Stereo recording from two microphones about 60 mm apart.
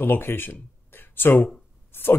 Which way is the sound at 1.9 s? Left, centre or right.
Left.